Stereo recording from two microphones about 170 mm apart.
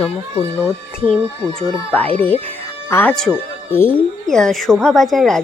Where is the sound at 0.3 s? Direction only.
15° right (ahead or behind).